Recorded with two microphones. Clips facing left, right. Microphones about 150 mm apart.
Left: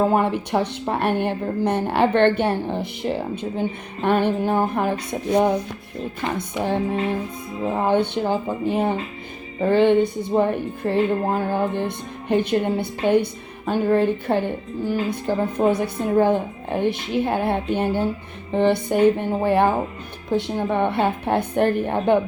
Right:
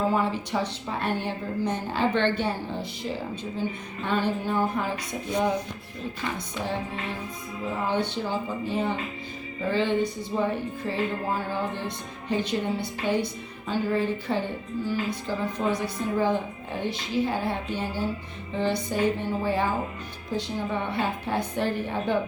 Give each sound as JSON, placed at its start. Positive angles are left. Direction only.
{"t": 0.1, "sound": "music", "side_deg": 60}
{"t": 7.8, "sound": "music", "side_deg": 55}